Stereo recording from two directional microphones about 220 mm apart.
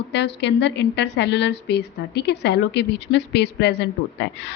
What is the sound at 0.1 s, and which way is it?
A woman's voice, 50° left (ahead or behind).